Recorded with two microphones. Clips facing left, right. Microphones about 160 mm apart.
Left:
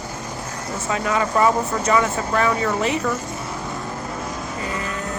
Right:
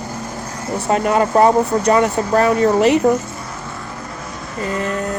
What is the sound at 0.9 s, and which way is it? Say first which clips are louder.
Speech: right 6 dB; 45° right (ahead or behind).